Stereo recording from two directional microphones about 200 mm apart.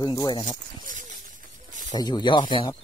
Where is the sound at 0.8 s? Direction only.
40° right (ahead or behind).